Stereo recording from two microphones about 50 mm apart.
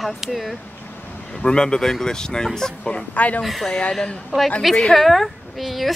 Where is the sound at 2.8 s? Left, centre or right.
Left.